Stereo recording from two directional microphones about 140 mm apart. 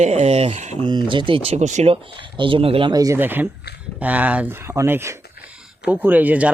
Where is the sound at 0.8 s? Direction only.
35° right (ahead or behind); by 1.9 s 55° right (ahead or behind).